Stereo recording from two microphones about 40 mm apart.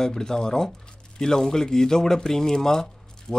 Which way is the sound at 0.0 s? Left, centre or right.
Centre.